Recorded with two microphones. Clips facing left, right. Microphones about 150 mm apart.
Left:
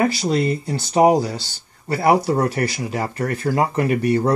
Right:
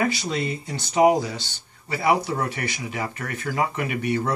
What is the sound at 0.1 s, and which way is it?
Speech, 35° left (ahead or behind).